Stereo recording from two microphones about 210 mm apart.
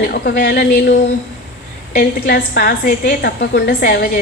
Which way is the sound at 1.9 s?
50° left (ahead or behind).